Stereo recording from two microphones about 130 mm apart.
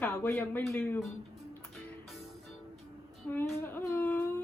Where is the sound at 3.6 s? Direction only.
15° left (ahead or behind).